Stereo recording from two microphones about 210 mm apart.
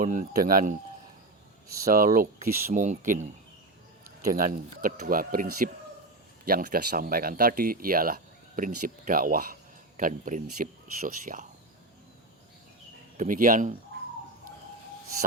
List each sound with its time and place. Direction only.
0.0 s speech: 40° right (ahead or behind)
1.9 s speech: 40° right (ahead or behind)
13.1 s speech: 40° right (ahead or behind)